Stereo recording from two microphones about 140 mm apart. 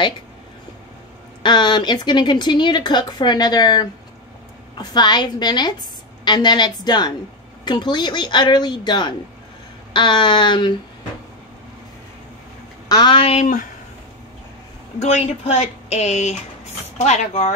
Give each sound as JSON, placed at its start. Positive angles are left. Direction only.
{"t": 1.4, "sound": "speech", "side_deg": 35}
{"t": 12.8, "sound": "speech", "side_deg": 30}
{"t": 15.0, "sound": "a woman's voice", "side_deg": 50}